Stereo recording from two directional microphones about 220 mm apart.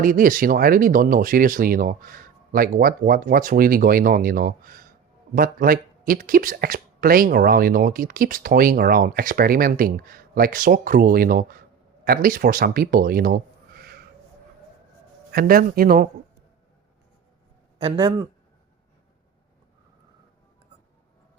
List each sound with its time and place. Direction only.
0.0 s speech: 40° right (ahead or behind)
15.3 s speech: 40° right (ahead or behind)
17.7 s speech: 25° right (ahead or behind)